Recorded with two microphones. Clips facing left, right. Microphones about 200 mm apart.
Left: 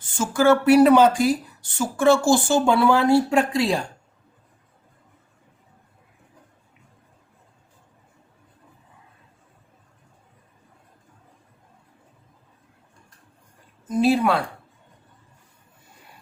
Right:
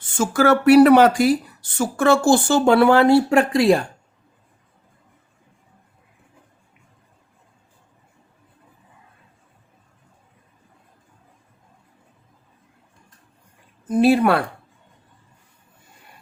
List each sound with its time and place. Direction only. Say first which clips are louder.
0.2 s speech: right 1 dB; 70° right (ahead or behind)
13.8 s speech: right 4 dB; 60° right (ahead or behind)